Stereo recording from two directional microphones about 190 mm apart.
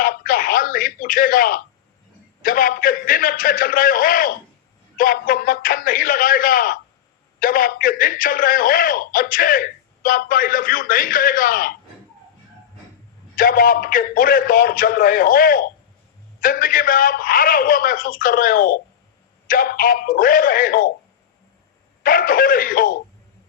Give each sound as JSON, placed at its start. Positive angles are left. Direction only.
{"t": 0.0, "sound": "a sound", "side_deg": 45}
{"t": 2.4, "sound": "a man's voice", "side_deg": 45}
{"t": 13.3, "sound": "a man's voice", "side_deg": 45}
{"t": 22.0, "sound": "a man's voice", "side_deg": 45}